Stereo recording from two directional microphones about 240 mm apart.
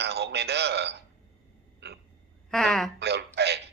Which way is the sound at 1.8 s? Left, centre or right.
Right.